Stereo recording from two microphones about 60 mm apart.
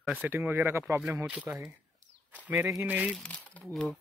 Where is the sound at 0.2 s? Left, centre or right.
Right.